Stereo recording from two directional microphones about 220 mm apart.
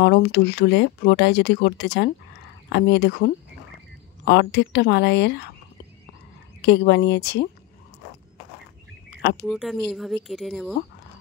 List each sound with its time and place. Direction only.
0.0 s speech: 50° left (ahead or behind)
6.6 s speech: 50° left (ahead or behind)
9.5 s speech: centre (ahead or behind)